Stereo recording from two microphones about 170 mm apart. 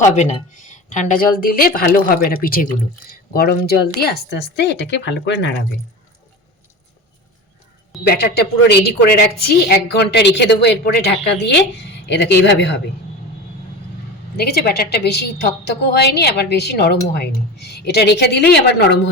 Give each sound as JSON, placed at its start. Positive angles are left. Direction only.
{"t": 0.1, "sound": "a woman's voice", "side_deg": 45}
{"t": 8.0, "sound": "a woman's voice", "side_deg": 70}
{"t": 14.3, "sound": "a woman's voice", "side_deg": 70}